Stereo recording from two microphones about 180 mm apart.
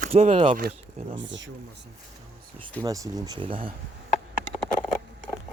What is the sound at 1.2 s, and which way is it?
Speech, 90° right.